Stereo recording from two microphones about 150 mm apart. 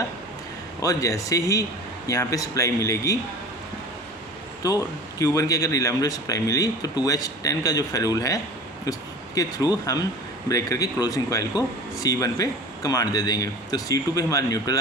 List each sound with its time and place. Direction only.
0.8 s speech: 20° left (ahead or behind)
5.2 s speech: 20° left (ahead or behind)